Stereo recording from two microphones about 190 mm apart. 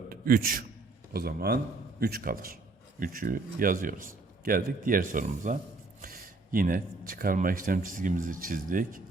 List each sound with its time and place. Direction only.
0.1 s a man's voice: 50° right (ahead or behind)